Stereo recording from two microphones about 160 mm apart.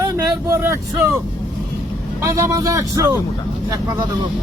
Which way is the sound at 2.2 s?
20° right (ahead or behind).